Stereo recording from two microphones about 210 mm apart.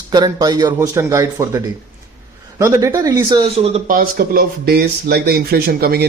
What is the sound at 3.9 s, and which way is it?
Speech, 40° right (ahead or behind).